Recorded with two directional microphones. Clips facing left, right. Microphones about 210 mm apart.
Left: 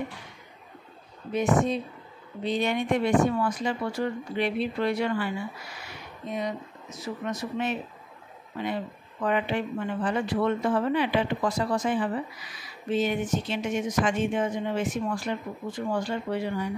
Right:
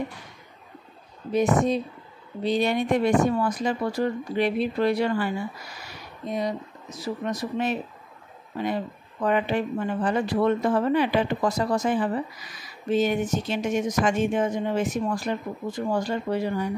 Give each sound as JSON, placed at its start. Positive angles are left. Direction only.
{"t": 1.3, "sound": "speech", "side_deg": -40}